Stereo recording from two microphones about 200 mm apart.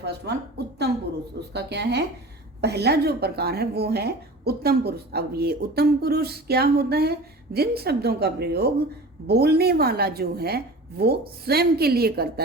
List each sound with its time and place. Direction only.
0.0 s a woman's voice: 55° right (ahead or behind)
0.9 s a sound: 55° right (ahead or behind)
1.5 s a woman's voice: 55° right (ahead or behind)